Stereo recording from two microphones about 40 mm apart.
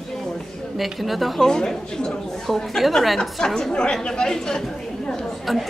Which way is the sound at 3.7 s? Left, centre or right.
Left.